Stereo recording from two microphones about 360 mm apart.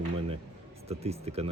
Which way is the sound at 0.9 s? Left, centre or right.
Centre.